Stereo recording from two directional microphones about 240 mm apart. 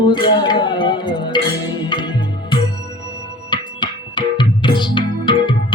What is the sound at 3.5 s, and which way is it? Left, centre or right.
Music, centre.